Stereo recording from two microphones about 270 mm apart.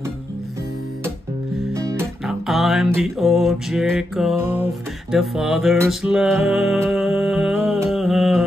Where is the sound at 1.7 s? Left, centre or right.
Centre.